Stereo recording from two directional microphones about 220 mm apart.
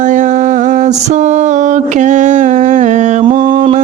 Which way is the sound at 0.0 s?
35° right (ahead or behind).